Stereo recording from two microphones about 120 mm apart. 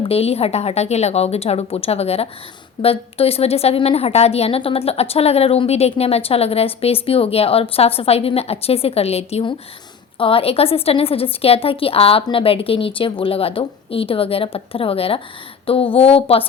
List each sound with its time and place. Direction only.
0.0 s a woman's voice: 55° left (ahead or behind)
10.2 s a woman's voice: 50° left (ahead or behind)